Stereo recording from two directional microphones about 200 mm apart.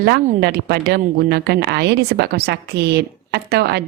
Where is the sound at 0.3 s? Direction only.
50° right (ahead or behind).